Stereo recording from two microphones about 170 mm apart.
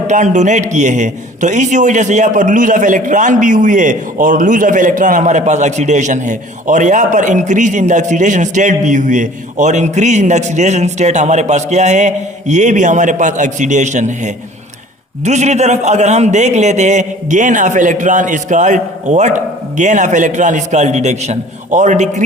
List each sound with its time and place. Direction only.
0.1 s a man's voice: 45° right (ahead or behind)